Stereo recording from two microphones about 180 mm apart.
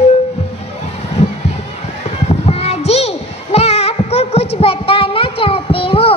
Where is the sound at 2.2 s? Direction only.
35° left (ahead or behind).